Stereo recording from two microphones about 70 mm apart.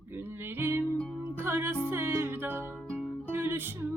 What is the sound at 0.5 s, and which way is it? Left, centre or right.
Music, right.